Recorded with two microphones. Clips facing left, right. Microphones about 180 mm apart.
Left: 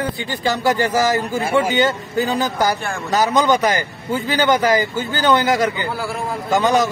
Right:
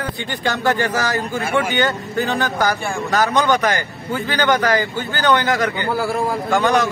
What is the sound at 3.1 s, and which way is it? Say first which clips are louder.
A man's voice: left 1 dB; 20° left (ahead or behind).